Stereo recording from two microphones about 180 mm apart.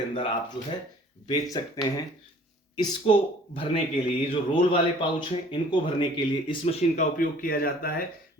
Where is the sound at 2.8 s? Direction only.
25° left (ahead or behind).